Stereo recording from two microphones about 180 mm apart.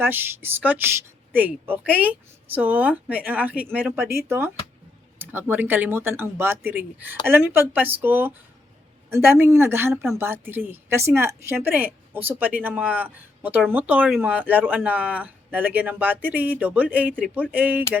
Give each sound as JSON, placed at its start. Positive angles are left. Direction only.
{"t": 0.0, "sound": "speech", "side_deg": -10}